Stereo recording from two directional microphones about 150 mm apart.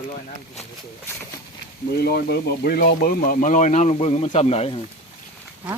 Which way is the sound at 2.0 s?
90° left.